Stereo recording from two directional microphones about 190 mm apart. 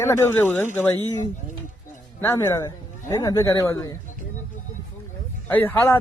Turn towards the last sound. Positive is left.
turn(degrees=10)  # may be behind; listen again after turning